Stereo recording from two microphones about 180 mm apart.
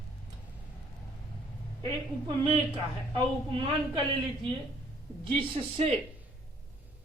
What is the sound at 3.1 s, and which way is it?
Speech, 30° right (ahead or behind).